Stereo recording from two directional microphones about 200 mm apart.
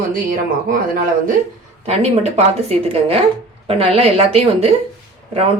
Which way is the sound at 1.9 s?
30° right (ahead or behind).